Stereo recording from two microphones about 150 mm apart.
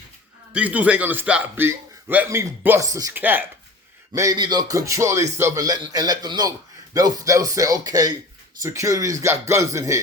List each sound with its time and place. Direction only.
0.5 s a man's voice: 10° right (ahead or behind)